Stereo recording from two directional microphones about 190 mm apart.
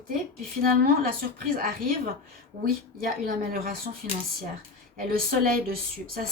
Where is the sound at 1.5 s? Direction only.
50° right (ahead or behind).